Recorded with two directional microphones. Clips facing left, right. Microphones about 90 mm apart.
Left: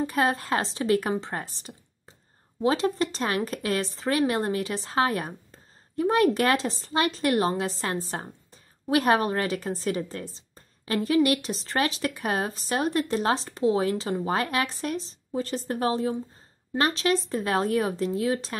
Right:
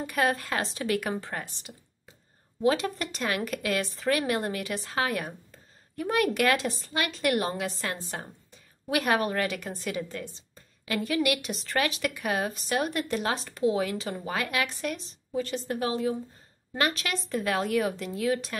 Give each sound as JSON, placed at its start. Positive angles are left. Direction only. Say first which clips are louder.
{"t": 0.0, "sound": "a woman's voice", "louder": "left 2 dB", "side_deg": 30}